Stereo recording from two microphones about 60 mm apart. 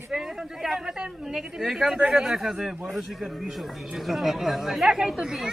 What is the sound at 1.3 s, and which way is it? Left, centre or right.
Speech, centre.